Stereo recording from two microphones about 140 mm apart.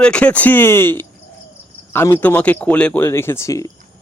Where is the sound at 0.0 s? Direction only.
10° left (ahead or behind).